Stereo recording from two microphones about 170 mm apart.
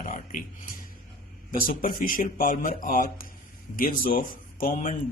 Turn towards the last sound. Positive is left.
turn(degrees=50)  # may be behind; listen again after turning